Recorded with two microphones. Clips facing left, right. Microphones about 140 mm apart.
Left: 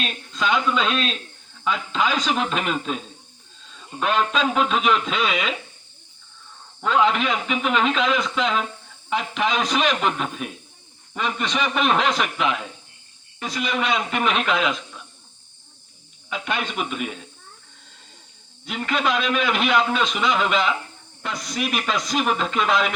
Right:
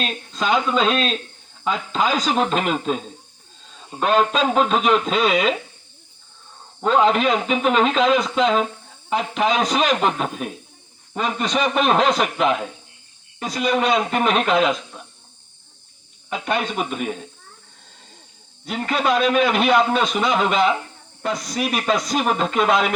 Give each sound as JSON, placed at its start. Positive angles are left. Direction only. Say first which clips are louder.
{"t": 0.0, "sound": "a man's voice", "louder": "right 1 dB", "side_deg": -35}
{"t": 6.8, "sound": "a man's voice", "louder": "right 3 dB", "side_deg": -35}
{"t": 16.3, "sound": "a man's voice", "louder": "right 4 dB", "side_deg": -40}
{"t": 18.6, "sound": "a man's voice", "louder": "right 2 dB", "side_deg": -40}